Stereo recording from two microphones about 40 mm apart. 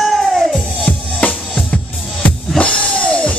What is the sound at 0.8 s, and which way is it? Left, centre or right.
Music, left.